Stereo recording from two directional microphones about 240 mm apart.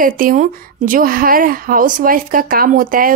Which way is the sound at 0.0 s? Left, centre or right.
Right.